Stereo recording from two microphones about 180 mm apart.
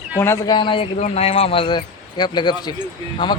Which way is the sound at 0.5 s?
25° left (ahead or behind).